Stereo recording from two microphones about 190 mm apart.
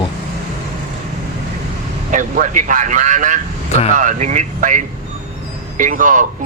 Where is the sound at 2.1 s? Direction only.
45° right (ahead or behind).